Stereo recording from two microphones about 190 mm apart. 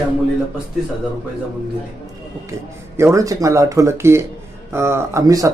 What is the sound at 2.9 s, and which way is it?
Speech, 15° right (ahead or behind).